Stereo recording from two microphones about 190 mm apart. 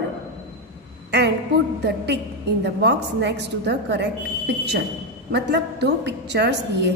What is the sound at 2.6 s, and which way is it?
A woman's voice, 65° right (ahead or behind).